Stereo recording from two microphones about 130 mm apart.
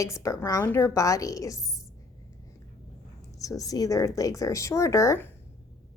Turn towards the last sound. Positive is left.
turn(degrees=20)  # may be behind; listen again after turning